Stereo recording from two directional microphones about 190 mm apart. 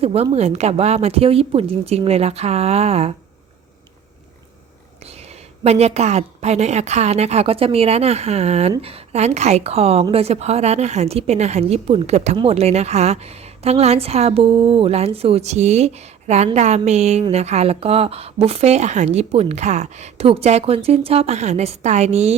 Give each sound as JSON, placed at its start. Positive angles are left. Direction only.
{"t": 0.0, "sound": "a woman's voice", "side_deg": -30}
{"t": 5.6, "sound": "a woman's voice", "side_deg": -35}